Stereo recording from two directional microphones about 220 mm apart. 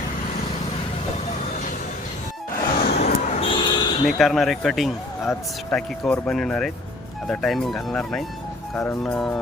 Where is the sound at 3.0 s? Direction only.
35° left (ahead or behind).